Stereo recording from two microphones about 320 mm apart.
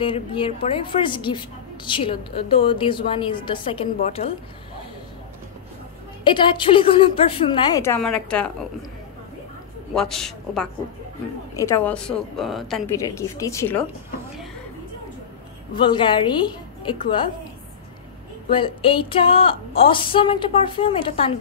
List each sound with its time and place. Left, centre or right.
0.0 s a woman's voice: centre
6.2 s a woman's voice: centre
9.9 s a man's voice: centre
15.7 s a woman's voice: centre
18.5 s a woman's voice: centre